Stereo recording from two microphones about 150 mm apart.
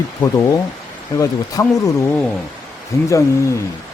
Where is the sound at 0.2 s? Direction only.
20° left (ahead or behind).